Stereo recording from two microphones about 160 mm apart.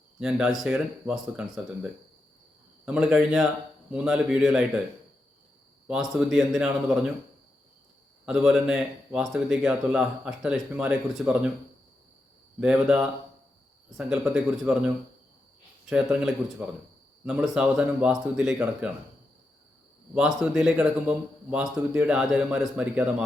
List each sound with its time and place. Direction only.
0.2 s speech: 5° right (ahead or behind)
5.9 s speech: centre (ahead or behind)
8.2 s speech: 5° right (ahead or behind)
12.5 s speech: 5° right (ahead or behind)
15.9 s speech: 5° right (ahead or behind)
20.1 s speech: 5° right (ahead or behind)